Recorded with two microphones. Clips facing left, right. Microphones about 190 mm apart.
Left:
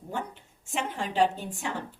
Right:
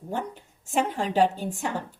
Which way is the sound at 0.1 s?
40° right (ahead or behind).